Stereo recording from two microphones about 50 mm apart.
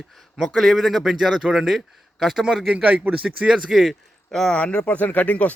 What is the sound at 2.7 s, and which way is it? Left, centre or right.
Speech, right.